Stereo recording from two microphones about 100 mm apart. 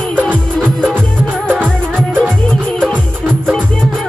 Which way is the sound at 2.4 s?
10° left (ahead or behind).